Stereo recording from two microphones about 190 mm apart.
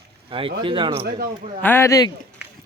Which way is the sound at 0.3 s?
30° right (ahead or behind).